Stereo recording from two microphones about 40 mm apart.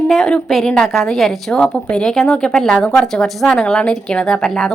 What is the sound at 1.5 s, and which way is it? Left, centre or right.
Speech, left.